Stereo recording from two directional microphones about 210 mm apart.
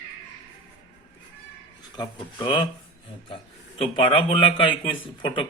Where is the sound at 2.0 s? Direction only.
20° left (ahead or behind).